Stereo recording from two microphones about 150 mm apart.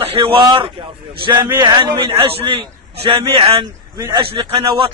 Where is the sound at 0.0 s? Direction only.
40° right (ahead or behind).